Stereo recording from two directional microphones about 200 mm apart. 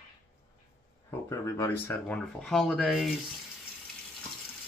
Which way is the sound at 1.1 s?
15° left (ahead or behind).